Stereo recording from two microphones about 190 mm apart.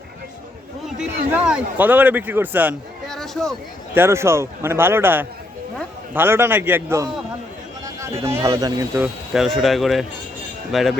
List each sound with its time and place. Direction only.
0.9 s a man's voice: 5° right (ahead or behind)
3.1 s a sound: centre (ahead or behind)
3.9 s a man's voice: 15° right (ahead or behind)
9.6 s speech: centre (ahead or behind)